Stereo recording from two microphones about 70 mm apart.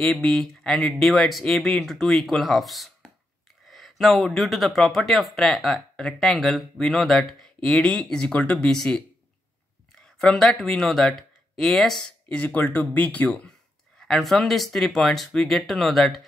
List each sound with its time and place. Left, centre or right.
0.0 s speech: centre
12.3 s speech: left
13.9 s speech: centre